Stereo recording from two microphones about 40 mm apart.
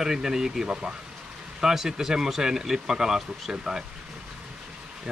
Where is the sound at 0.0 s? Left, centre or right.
Centre.